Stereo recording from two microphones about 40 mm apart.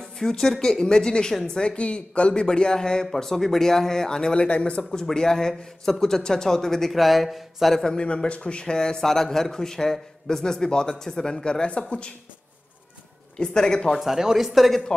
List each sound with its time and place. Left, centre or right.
0.2 s speech: centre; by 5.0 s left
5.1 s speech: centre
6.9 s a man's voice: centre
7.8 s speech: centre
8.1 s speech: left
13.4 s speech: centre
13.9 s a man's voice: centre